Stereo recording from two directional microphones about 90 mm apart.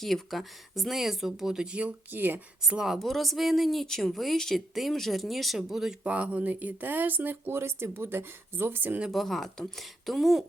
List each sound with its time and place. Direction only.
0.0 s speech: centre (ahead or behind); by 2.4 s 20° right (ahead or behind)
2.6 s speech: 5° right (ahead or behind)
6.0 s speech: 15° right (ahead or behind)
9.0 s speech: centre (ahead or behind)